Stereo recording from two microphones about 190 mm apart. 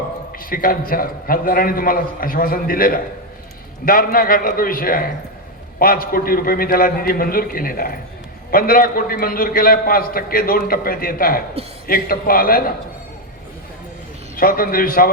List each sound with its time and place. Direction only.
0.3 s a man's voice: 50° left (ahead or behind)
14.3 s a man's voice: 50° left (ahead or behind)